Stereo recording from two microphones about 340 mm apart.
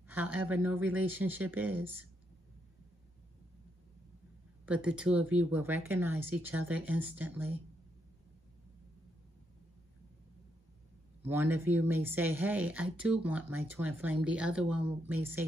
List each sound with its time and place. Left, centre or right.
0.1 s speech: centre
4.6 s speech: centre
11.2 s speech: centre